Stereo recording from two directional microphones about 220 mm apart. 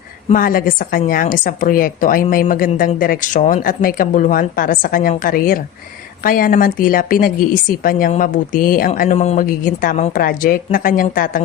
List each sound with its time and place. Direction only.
0.3 s a woman's voice: 40° left (ahead or behind)